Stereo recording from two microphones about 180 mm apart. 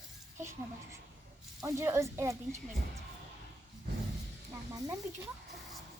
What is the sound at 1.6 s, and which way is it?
A child's voice, 15° right (ahead or behind).